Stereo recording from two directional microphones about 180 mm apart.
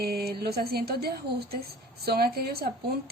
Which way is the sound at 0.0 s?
60° right (ahead or behind).